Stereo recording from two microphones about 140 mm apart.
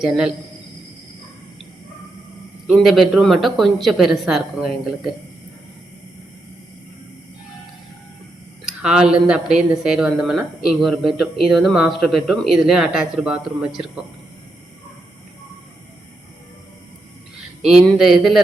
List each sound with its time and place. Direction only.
0.0 s speech: 5° right (ahead or behind)
2.6 s speech: centre (ahead or behind)
8.6 s speech: 5° right (ahead or behind)
17.6 s speech: centre (ahead or behind)